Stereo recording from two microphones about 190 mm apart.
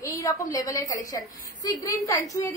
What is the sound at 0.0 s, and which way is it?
A woman's voice, 15° left (ahead or behind).